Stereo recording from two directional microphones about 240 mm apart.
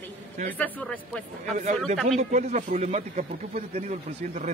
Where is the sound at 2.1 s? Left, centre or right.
Right.